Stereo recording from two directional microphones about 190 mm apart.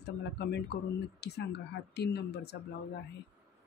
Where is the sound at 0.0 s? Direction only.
60° left (ahead or behind).